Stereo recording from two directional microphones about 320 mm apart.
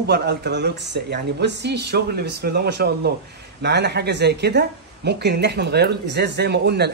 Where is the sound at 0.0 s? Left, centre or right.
Right.